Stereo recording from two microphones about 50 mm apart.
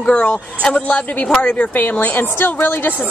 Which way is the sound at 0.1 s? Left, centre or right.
Left.